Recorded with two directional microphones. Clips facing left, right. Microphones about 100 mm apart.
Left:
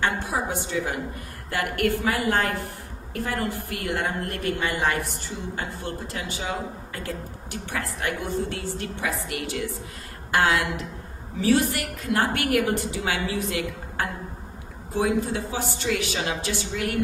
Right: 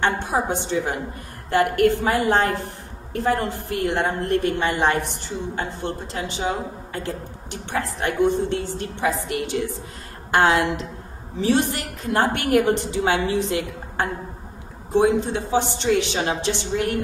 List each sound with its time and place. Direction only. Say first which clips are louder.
0.0 s a woman's voice: right 4 dB; 25° right (ahead or behind)